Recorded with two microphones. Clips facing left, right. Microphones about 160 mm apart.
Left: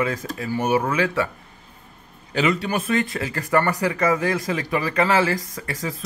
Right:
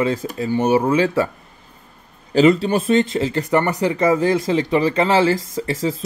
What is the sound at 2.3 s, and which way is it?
Speech, 35° right (ahead or behind).